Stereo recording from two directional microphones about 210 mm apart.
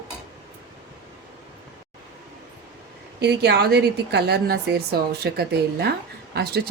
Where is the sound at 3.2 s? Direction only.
50° right (ahead or behind).